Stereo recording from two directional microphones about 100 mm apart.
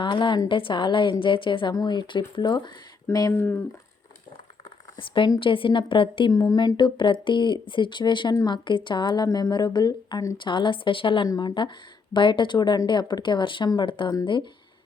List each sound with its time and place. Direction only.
0.0 s a woman's voice: 55° left (ahead or behind)
3.3 s speech: 20° left (ahead or behind)
4.9 s a woman's voice: 60° left (ahead or behind)
6.3 s speech: 40° left (ahead or behind)
6.7 s a woman's voice: 55° left (ahead or behind)
10.3 s a woman's voice: 55° left (ahead or behind)
11.3 s a woman's voice: 45° left (ahead or behind)